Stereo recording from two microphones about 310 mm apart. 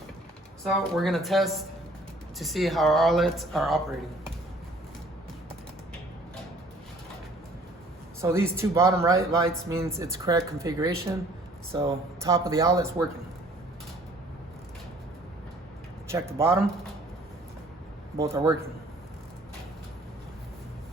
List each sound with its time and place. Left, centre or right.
0.6 s speech: centre
8.2 s speech: centre
16.0 s speech: centre
18.2 s speech: centre